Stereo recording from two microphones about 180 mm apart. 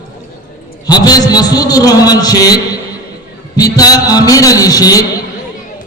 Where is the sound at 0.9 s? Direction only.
20° left (ahead or behind).